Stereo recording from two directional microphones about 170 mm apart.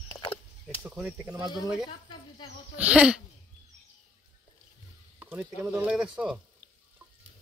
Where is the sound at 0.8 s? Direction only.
15° right (ahead or behind).